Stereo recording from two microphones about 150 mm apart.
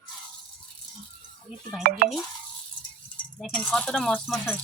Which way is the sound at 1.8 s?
65° right (ahead or behind).